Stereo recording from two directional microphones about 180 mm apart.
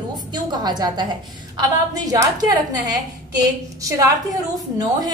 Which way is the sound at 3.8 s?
20° right (ahead or behind).